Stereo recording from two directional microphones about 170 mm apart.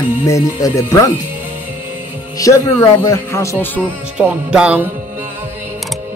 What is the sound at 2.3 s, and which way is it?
Speech, 20° left (ahead or behind).